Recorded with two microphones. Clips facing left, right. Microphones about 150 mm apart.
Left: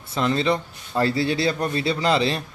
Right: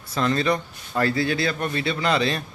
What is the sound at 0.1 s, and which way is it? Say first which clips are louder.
A man's voice: left 1 dB; 20° left (ahead or behind).